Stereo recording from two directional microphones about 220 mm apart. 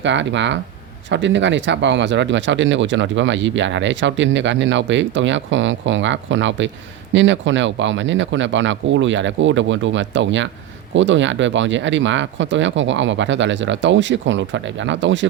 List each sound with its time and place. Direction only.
0.0 s speech: 55° right (ahead or behind)